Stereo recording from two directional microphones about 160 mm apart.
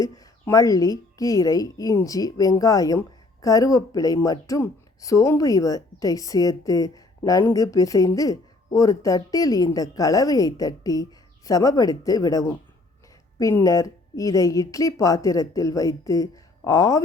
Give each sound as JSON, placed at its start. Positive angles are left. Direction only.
{"t": 0.0, "sound": "speech", "side_deg": 20}